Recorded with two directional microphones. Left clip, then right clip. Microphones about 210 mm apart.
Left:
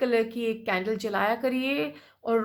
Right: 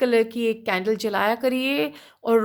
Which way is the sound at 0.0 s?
40° right (ahead or behind).